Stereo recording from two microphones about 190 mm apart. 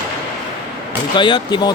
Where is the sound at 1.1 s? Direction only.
25° left (ahead or behind).